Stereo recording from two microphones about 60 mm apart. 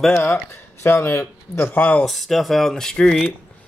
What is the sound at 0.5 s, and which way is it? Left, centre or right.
Speech, left.